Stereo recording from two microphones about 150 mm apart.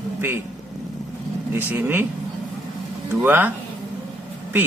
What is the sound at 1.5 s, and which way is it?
Speech, 15° right (ahead or behind).